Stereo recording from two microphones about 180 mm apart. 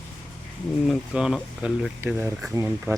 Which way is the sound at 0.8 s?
5° right (ahead or behind).